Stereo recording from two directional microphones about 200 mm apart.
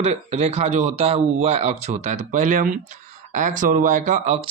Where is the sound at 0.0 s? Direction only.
35° right (ahead or behind).